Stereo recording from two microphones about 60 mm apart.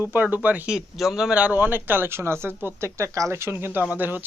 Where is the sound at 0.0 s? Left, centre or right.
Right.